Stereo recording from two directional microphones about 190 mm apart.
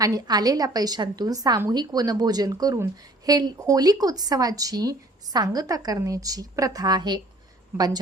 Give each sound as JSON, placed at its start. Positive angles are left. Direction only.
{"t": 0.0, "sound": "speech", "side_deg": -20}